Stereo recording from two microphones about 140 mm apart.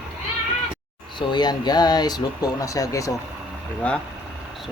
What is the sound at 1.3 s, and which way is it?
Speech, 30° left (ahead or behind).